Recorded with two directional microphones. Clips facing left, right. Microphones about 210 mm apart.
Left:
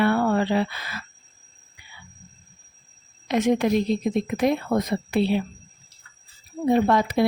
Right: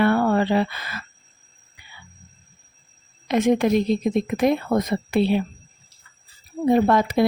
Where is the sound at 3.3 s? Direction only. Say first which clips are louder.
Right 2 dB; 50° right (ahead or behind).